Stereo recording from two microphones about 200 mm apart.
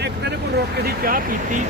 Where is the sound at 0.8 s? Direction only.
45° right (ahead or behind).